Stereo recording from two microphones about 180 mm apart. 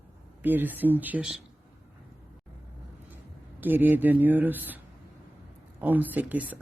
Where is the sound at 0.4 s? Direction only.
10° right (ahead or behind).